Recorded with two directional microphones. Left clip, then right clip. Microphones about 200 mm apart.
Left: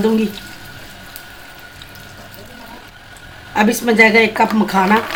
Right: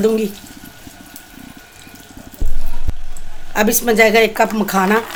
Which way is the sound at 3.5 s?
60° right (ahead or behind).